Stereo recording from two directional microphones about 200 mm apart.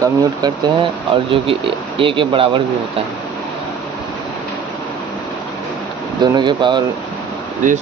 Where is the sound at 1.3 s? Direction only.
25° right (ahead or behind).